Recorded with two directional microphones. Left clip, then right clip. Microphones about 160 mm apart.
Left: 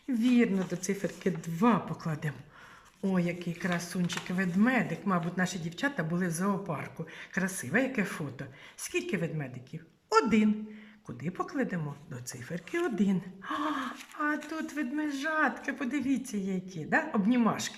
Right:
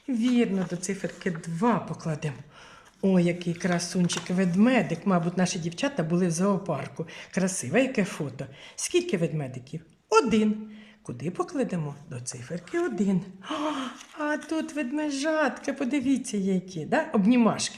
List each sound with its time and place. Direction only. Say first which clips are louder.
0.1 s a man's voice: right 2 dB; 10° right (ahead or behind)